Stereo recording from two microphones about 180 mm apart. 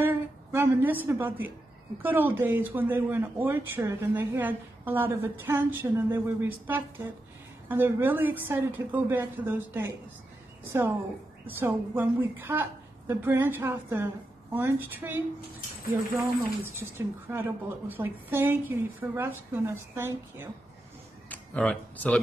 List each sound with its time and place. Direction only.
0.0 s a sound: 10° right (ahead or behind)
1.0 s speech: 10° right (ahead or behind)
11.4 s speech: 10° right (ahead or behind)
21.3 s speech: 5° left (ahead or behind)